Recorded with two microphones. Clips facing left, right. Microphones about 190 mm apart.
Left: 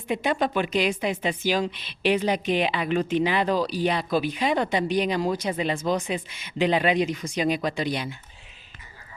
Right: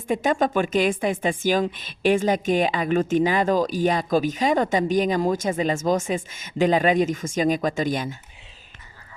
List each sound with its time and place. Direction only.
0.1 s a woman's voice: 45° right (ahead or behind)